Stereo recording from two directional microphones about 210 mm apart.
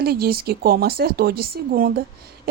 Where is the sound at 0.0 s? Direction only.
45° right (ahead or behind).